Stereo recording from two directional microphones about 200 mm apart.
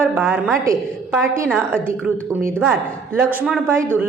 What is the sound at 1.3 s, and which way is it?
Speech, 5° left (ahead or behind).